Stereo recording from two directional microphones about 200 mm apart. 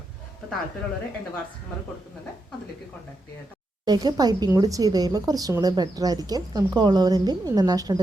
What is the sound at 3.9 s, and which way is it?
A woman's voice, 20° right (ahead or behind).